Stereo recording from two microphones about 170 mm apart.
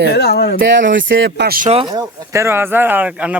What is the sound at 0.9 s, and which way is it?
Speech, 90° right.